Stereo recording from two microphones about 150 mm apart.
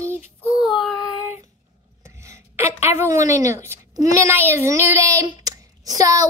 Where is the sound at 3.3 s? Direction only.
20° right (ahead or behind).